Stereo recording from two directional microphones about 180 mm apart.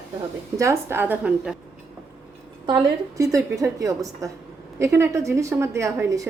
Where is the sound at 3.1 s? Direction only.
20° right (ahead or behind).